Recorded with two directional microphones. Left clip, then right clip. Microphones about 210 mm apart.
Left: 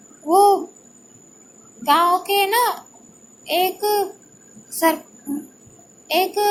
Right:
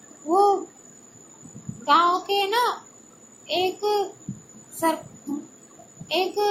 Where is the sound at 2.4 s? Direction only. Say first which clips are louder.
Left 4 dB; 20° left (ahead or behind).